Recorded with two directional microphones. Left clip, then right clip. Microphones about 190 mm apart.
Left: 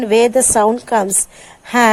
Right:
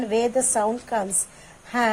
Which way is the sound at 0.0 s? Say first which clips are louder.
Left 10 dB; 30° left (ahead or behind).